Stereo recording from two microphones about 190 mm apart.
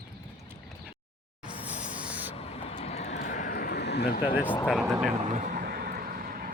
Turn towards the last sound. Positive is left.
turn(degrees=-50)  # may be behind; listen again after turning